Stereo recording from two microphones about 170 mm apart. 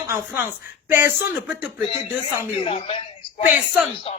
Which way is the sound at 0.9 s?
15° right (ahead or behind).